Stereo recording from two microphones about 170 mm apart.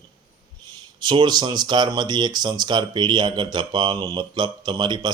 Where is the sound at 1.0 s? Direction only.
25° right (ahead or behind).